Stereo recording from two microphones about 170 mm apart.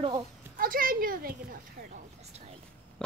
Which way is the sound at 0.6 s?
55° right (ahead or behind).